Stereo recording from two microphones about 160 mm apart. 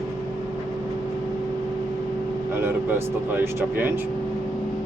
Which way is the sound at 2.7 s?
15° right (ahead or behind).